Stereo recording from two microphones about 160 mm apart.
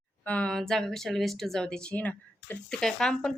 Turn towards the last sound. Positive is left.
turn(degrees=0)  # may be behind; listen again after turning